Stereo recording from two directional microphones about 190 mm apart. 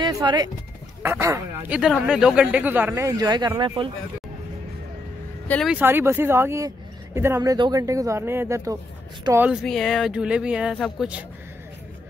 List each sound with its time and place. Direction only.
0.0 s speech: 20° right (ahead or behind)
5.5 s speech: centre (ahead or behind)
5.8 s speech: 10° right (ahead or behind)
9.5 s speech: centre (ahead or behind)